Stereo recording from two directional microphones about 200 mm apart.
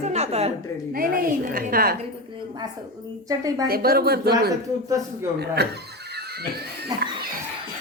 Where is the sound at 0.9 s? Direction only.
45° right (ahead or behind).